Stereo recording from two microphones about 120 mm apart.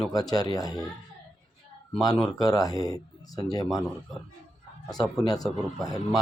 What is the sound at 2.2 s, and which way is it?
Speech, 30° left (ahead or behind).